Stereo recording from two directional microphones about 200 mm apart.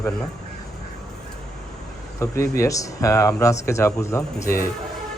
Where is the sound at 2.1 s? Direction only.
15° left (ahead or behind).